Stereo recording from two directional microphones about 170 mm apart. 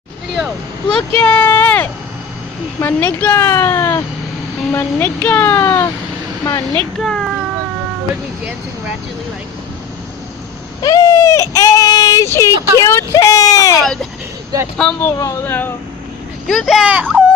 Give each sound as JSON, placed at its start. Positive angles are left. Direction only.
{"t": 1.2, "sound": "a woman's voice", "side_deg": 10}
{"t": 7.0, "sound": "speech", "side_deg": 0}
{"t": 10.8, "sound": "speech", "side_deg": 20}
{"t": 13.8, "sound": "speech", "side_deg": 0}
{"t": 15.1, "sound": "a woman's voice", "side_deg": 20}
{"t": 16.5, "sound": "speech", "side_deg": 0}